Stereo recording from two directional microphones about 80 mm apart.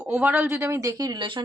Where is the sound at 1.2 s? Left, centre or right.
Right.